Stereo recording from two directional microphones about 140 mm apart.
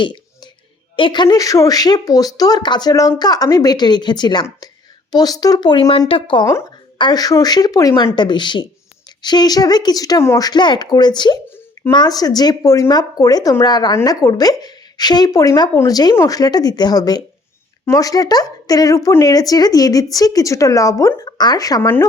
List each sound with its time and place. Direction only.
0.9 s speech: 35° left (ahead or behind)
6.5 s speech: 20° left (ahead or behind)
21.8 s speech: 15° left (ahead or behind)